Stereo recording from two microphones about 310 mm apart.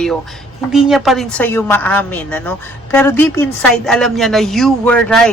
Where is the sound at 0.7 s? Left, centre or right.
Centre.